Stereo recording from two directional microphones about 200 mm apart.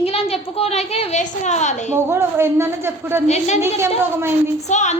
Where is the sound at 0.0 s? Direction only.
30° left (ahead or behind).